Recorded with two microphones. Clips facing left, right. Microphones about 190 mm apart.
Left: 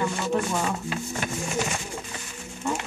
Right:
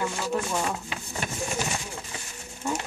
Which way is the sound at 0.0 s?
5° right (ahead or behind).